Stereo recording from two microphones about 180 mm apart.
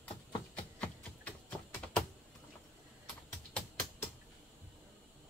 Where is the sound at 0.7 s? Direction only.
5° left (ahead or behind).